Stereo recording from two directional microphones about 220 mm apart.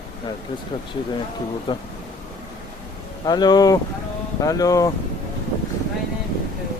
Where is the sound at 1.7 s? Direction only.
20° left (ahead or behind).